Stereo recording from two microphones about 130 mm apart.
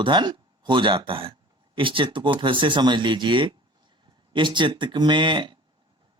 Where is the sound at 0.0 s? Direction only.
35° right (ahead or behind).